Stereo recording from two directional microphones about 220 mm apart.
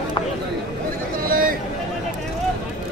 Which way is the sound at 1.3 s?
40° right (ahead or behind).